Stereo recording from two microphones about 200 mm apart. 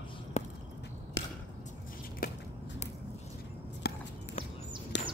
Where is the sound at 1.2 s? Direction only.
65° left (ahead or behind).